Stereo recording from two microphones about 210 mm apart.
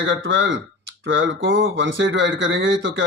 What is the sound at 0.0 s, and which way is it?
Speech, 60° right (ahead or behind).